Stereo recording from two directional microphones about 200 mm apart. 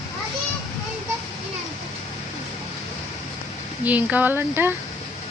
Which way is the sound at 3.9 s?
10° right (ahead or behind).